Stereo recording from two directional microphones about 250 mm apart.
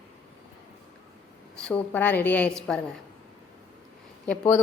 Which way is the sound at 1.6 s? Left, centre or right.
Centre.